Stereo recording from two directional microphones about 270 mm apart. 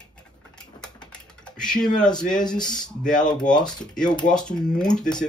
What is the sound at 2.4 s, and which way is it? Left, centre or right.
Speech, centre.